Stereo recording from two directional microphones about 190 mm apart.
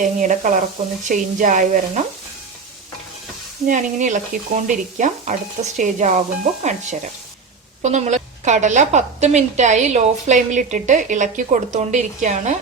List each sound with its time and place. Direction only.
0.0 s a woman's voice: 40° right (ahead or behind)
3.7 s a woman's voice: 40° right (ahead or behind)